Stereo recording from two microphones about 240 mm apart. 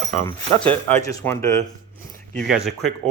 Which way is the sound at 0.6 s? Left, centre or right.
Centre.